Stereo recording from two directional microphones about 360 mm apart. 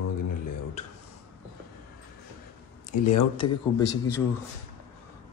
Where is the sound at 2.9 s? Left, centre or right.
Left.